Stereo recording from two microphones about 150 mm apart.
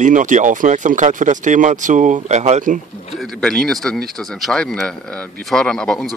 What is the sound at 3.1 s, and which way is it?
Speech, centre (ahead or behind).